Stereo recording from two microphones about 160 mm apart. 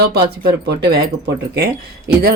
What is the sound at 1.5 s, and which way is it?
Speech, 80° right.